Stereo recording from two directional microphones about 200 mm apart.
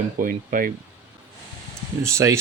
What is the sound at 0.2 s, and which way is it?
Speech, 45° right (ahead or behind).